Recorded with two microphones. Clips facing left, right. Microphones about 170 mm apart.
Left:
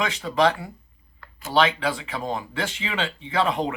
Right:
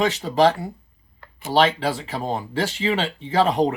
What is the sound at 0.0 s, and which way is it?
Speech, 35° right (ahead or behind).